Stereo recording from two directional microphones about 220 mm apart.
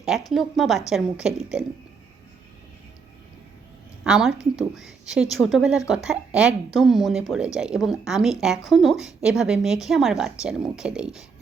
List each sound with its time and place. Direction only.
0.3 s speech: centre (ahead or behind)
4.0 s speech: 5° right (ahead or behind)